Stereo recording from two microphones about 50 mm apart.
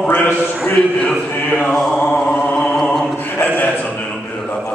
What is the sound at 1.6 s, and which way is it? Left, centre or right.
Mantra, centre.